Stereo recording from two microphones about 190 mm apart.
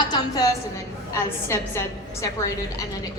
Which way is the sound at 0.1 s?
20° left (ahead or behind).